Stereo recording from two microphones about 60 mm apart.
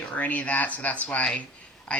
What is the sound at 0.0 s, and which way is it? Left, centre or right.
Speech, left.